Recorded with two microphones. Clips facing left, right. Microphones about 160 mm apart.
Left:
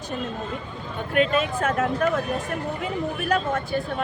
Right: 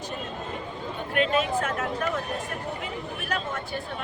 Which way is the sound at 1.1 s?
45° left (ahead or behind).